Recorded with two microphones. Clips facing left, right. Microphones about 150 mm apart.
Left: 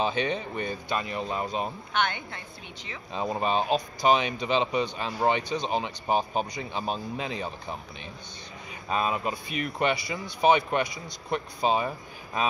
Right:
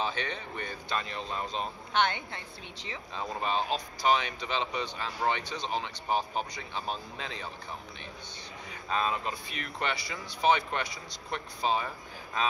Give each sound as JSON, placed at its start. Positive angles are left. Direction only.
{"t": 0.0, "sound": "speech", "side_deg": 15}
{"t": 2.0, "sound": "a woman's voice", "side_deg": -30}
{"t": 3.2, "sound": "speech", "side_deg": 20}
{"t": 8.8, "sound": "speech", "side_deg": 15}